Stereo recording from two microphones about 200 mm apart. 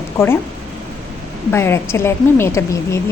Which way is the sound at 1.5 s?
10° left (ahead or behind).